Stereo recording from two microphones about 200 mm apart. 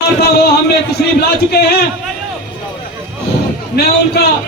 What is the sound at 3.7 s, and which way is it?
Speech, 55° left (ahead or behind).